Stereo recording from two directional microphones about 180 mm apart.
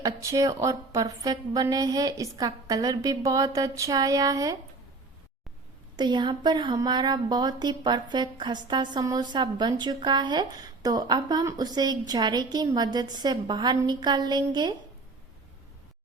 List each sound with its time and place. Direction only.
0.0 s speech: 20° right (ahead or behind)
6.0 s speech: 25° right (ahead or behind)